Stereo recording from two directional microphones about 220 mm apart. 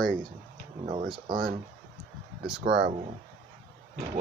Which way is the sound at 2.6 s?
50° right (ahead or behind).